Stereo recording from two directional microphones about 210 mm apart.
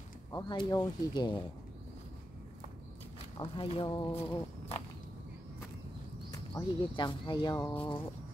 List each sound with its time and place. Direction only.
0.3 s speech: 20° left (ahead or behind)
3.3 s speech: 25° left (ahead or behind)
6.3 s speech: 20° left (ahead or behind)